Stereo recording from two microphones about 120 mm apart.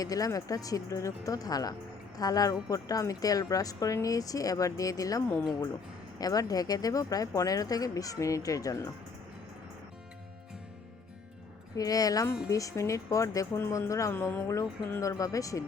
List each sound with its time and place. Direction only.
0.0 s speech: 30° left (ahead or behind)
11.8 s speech: 30° left (ahead or behind)